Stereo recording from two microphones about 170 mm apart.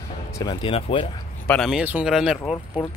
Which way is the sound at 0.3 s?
25° left (ahead or behind).